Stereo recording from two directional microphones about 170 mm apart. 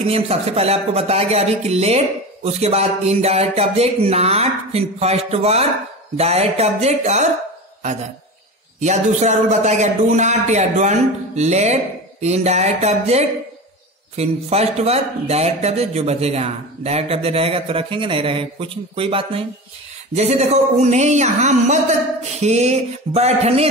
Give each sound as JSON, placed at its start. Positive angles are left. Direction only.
{"t": 0.0, "sound": "speech", "side_deg": -35}
{"t": 8.7, "sound": "speech", "side_deg": -45}